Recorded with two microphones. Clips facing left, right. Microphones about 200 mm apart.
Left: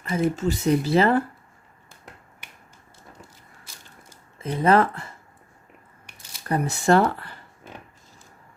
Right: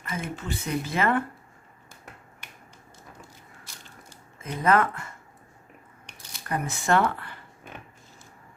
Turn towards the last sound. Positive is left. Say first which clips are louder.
# left 5 dB
turn(degrees=40)  # may be behind; listen again after turning